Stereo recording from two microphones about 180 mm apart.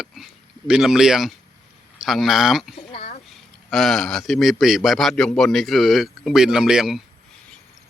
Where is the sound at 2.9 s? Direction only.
30° left (ahead or behind).